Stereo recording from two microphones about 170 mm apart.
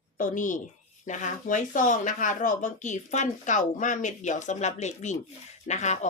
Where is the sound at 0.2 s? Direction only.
50° left (ahead or behind).